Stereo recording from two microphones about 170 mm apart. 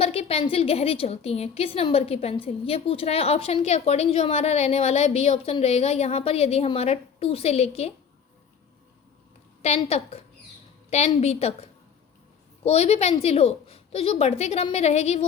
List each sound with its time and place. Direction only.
0.0 s a woman's voice: 35° left (ahead or behind)
9.6 s a woman's voice: 40° left (ahead or behind)